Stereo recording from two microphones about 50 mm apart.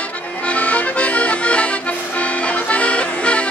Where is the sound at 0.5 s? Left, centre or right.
Left.